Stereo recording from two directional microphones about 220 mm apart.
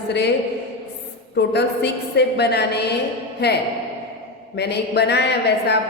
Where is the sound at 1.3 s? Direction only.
50° left (ahead or behind).